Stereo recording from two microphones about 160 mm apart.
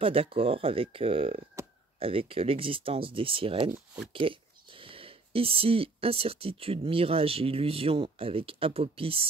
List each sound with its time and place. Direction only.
0.0 s speech: 35° right (ahead or behind)
3.7 s speech: 10° right (ahead or behind)
4.1 s speech: 35° right (ahead or behind)